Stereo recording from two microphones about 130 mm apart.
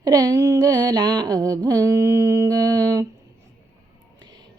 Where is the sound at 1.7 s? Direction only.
25° right (ahead or behind).